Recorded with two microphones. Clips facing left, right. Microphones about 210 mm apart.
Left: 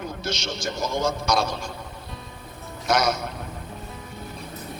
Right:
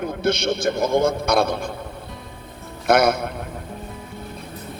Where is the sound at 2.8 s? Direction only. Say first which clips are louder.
Right 6 dB; 55° right (ahead or behind).